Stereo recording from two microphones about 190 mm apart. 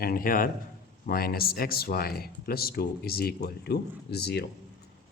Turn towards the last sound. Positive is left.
turn(degrees=60)  # may be behind; listen again after turning